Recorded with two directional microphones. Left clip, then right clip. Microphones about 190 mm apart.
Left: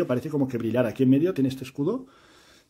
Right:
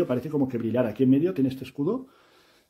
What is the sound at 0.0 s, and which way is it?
Speech, 20° left (ahead or behind).